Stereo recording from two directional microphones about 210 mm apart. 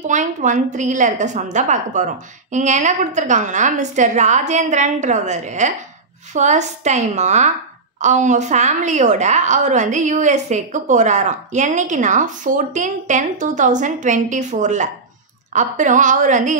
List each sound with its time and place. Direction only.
0.0 s a woman's voice: 35° right (ahead or behind)